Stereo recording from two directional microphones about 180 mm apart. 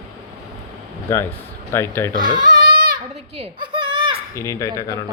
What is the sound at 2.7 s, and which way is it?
Child singing, 55° right (ahead or behind).